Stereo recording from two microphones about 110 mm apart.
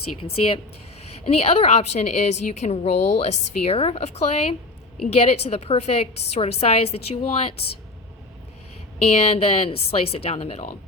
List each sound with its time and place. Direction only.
1.2 s a woman's voice: 65° left (ahead or behind)
9.0 s a woman's voice: 70° left (ahead or behind)